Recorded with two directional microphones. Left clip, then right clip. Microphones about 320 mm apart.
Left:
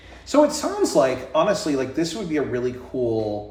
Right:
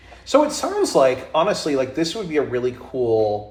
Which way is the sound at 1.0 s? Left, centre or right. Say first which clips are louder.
Right 3 dB; centre.